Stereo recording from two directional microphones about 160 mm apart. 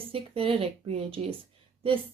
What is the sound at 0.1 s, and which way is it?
Speech, 35° right (ahead or behind).